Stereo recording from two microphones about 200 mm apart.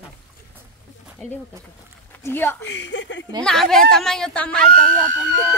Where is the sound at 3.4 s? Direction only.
Centre (ahead or behind).